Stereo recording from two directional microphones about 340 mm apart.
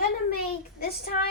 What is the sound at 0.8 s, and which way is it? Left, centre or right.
Speech, left.